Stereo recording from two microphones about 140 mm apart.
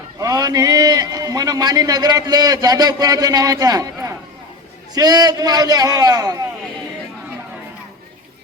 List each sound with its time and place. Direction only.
0.2 s a man's voice: 25° right (ahead or behind)